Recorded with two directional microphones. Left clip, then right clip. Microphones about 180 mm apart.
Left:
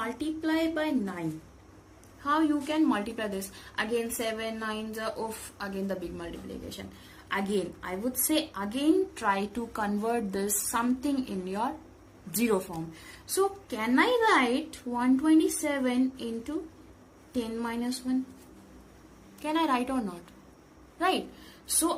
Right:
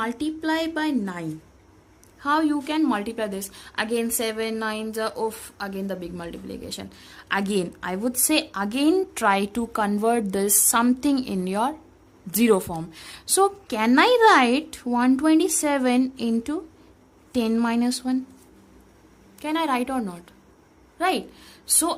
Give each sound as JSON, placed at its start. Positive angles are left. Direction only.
{"t": 0.0, "sound": "a woman's voice", "side_deg": -50}
{"t": 2.2, "sound": "a woman's voice", "side_deg": -50}
{"t": 12.3, "sound": "a woman's voice", "side_deg": -45}
{"t": 19.4, "sound": "a woman's voice", "side_deg": -40}